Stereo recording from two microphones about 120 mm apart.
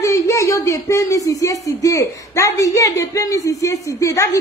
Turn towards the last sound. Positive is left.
turn(degrees=25)  # may be behind; listen again after turning